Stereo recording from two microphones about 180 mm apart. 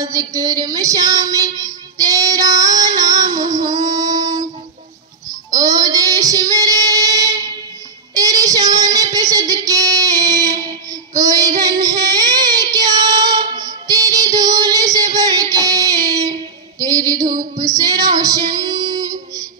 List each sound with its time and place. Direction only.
0.0 s child singing: 20° right (ahead or behind)
5.5 s child singing: 20° right (ahead or behind)
15.1 s a sound: 20° right (ahead or behind)
16.8 s female singing: 20° right (ahead or behind)